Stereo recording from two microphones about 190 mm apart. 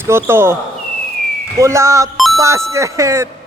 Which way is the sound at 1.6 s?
15° right (ahead or behind).